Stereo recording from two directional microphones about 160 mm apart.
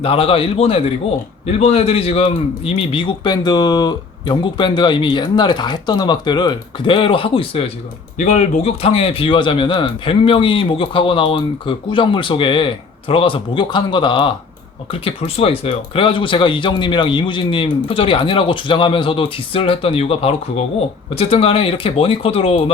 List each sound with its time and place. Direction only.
0.0 s a man's voice: 35° left (ahead or behind)
8.2 s speech: 45° left (ahead or behind)